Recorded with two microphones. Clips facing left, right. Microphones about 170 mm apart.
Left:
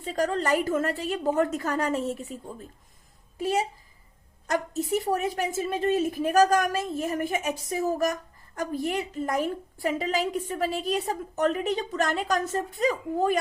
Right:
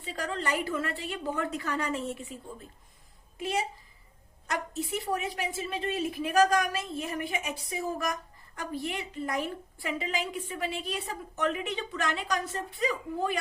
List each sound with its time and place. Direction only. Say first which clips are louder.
0.0 s a woman's voice: left 7 dB; 40° left (ahead or behind)